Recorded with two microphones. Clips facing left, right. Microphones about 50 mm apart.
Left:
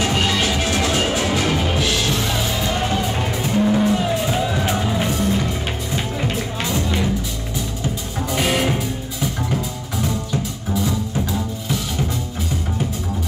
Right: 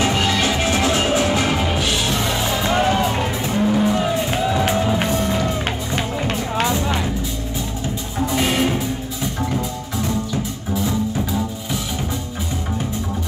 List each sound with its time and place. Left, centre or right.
0.1 s music: centre
5.0 s music: right
8.5 s music: centre